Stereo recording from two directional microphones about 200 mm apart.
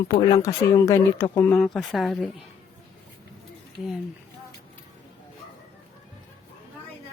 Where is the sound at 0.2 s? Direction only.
15° left (ahead or behind); by 2.3 s centre (ahead or behind).